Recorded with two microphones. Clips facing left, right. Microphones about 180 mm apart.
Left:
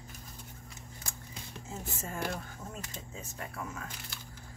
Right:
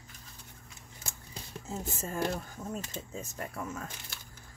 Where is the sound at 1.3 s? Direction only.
35° right (ahead or behind).